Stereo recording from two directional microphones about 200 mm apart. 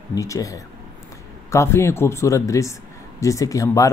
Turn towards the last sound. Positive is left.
turn(degrees=15)  # may be behind; listen again after turning